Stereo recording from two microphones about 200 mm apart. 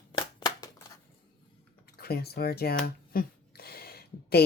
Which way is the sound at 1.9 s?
50° left (ahead or behind).